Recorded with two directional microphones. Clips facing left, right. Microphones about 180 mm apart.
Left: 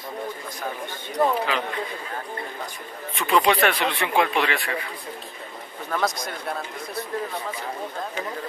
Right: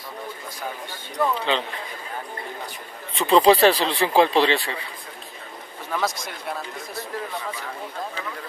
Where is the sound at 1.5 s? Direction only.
25° right (ahead or behind).